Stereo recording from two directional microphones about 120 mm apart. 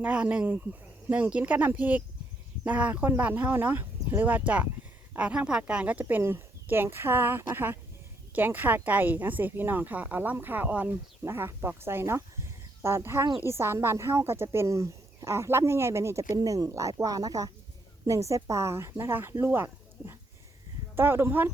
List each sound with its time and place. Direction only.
0.0 s speech: 10° right (ahead or behind)